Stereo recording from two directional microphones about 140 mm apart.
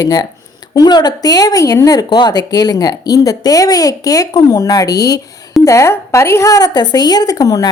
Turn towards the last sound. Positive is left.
turn(degrees=25)  # may be behind; listen again after turning